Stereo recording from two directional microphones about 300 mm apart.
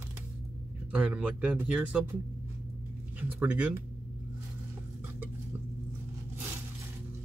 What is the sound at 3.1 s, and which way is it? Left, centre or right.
Speech, centre.